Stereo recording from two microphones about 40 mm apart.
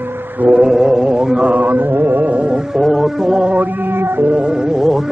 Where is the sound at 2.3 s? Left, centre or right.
Right.